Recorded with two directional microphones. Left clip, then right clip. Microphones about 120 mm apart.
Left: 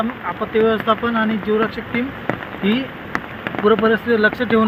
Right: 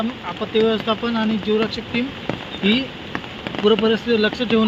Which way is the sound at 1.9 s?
60° right (ahead or behind).